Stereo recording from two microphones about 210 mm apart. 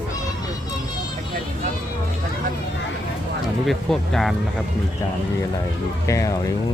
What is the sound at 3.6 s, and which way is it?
Speech, centre (ahead or behind).